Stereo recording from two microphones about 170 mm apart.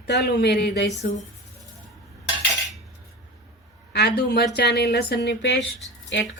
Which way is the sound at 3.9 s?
75° left (ahead or behind).